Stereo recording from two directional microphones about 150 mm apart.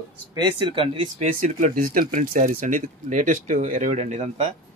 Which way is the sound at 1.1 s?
55° right (ahead or behind).